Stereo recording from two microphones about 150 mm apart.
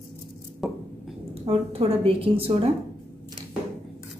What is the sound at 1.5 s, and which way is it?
Speech, 40° right (ahead or behind).